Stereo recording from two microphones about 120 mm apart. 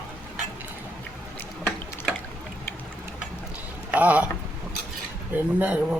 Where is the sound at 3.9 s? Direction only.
10° right (ahead or behind).